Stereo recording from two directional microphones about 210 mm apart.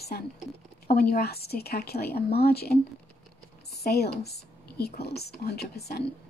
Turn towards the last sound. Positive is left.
turn(degrees=50)  # may be behind; listen again after turning